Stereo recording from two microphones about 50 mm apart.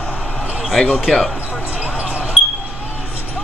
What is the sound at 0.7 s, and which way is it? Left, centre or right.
Speech, centre.